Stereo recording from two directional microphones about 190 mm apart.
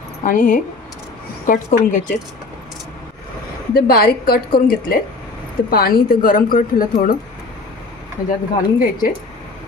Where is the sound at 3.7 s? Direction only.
50° left (ahead or behind).